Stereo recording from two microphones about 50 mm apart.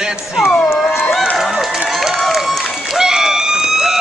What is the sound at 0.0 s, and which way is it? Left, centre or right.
Speech, centre.